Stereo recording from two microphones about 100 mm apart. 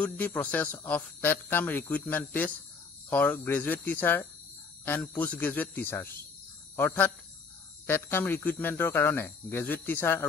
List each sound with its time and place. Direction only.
0.0 s speech: 15° left (ahead or behind)